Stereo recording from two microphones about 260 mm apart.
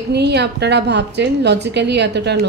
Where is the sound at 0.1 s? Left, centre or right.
Right.